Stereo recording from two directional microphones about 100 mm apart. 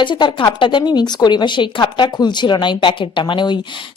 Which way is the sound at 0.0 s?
50° left (ahead or behind).